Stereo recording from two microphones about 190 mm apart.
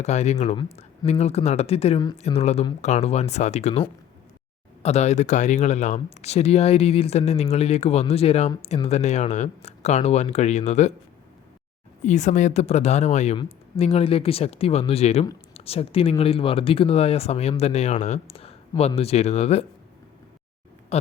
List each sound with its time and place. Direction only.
0.0 s speech: 35° left (ahead or behind)
12.0 s speech: 40° left (ahead or behind)
20.9 s a sound: 35° left (ahead or behind)